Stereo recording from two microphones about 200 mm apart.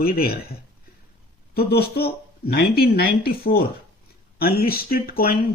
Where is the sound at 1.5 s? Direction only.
50° left (ahead or behind).